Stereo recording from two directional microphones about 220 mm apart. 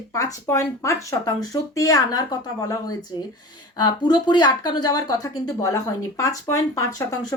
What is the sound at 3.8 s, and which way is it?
Speech, 20° left (ahead or behind).